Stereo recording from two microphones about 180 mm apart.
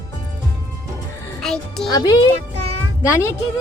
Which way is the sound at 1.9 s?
20° left (ahead or behind).